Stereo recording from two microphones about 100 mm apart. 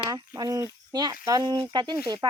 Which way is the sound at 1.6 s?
55° right (ahead or behind).